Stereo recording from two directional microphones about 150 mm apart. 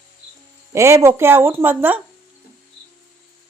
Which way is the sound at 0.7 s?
20° right (ahead or behind).